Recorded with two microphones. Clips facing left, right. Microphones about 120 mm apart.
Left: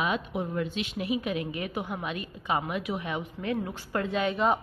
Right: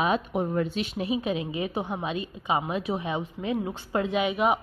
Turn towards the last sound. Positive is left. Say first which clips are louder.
# right 2 dB
turn(degrees=-15)  # may be behind; listen again after turning